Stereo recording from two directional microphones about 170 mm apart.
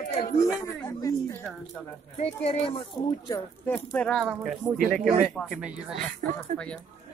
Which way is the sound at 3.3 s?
10° left (ahead or behind).